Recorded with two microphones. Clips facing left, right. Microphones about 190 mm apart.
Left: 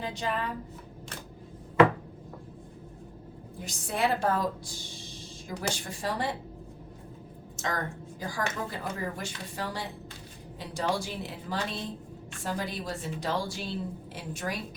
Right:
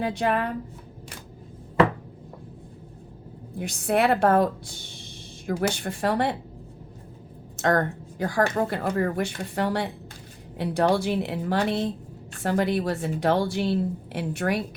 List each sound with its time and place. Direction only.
0.0 s a woman's voice: 60° right (ahead or behind)
3.6 s a woman's voice: 65° right (ahead or behind)
7.5 s a woman's voice: 65° right (ahead or behind)